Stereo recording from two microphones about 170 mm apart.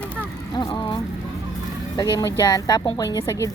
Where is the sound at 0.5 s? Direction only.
25° left (ahead or behind).